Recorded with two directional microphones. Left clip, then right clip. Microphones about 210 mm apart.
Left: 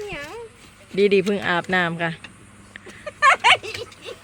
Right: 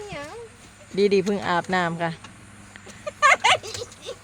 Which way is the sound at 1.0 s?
5° left (ahead or behind).